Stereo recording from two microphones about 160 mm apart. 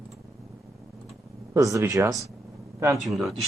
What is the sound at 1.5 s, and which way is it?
Speech, 20° right (ahead or behind).